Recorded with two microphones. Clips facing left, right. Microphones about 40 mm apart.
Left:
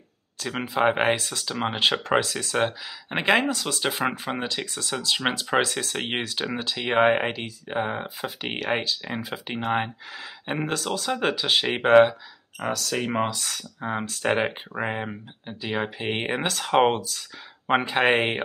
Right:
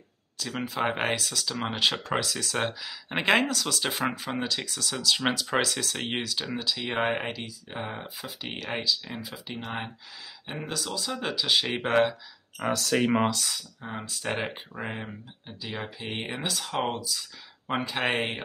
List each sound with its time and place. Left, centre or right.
0.4 s speech: left
0.8 s speech: centre
1.1 s speech: left
1.5 s speech: centre
2.5 s speech: centre
3.4 s speech: centre
12.6 s speech: centre
13.7 s speech: left
17.6 s speech: left